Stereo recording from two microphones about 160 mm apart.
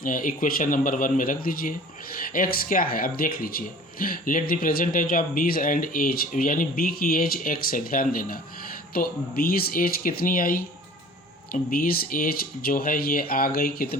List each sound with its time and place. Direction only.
0.0 s speech: 60° left (ahead or behind)